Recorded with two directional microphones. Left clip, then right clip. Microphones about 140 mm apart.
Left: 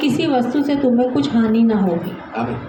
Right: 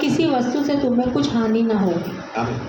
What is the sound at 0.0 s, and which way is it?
A man's voice, 45° left (ahead or behind).